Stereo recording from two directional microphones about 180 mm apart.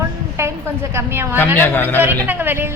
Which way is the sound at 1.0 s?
15° right (ahead or behind).